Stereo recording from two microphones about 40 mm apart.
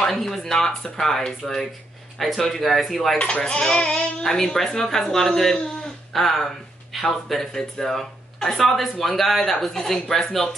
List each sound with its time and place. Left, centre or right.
0.0 s speech: centre
3.2 s speech: left; by 10.5 s centre